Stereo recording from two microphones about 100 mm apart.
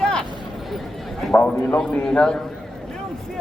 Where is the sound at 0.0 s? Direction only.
5° left (ahead or behind).